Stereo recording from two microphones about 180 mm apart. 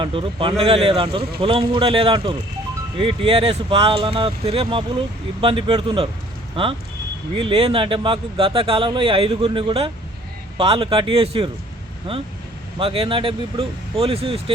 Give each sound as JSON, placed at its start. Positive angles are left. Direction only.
{"t": 0.0, "sound": "speech", "side_deg": -30}
{"t": 12.8, "sound": "speech", "side_deg": -30}